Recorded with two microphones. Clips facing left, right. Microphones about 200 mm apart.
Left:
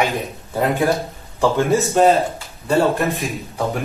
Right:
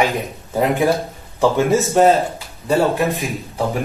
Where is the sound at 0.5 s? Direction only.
15° right (ahead or behind).